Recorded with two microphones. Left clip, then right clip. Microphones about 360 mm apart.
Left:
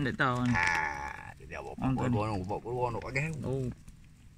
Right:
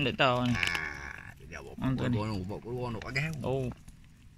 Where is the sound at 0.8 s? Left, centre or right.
Centre.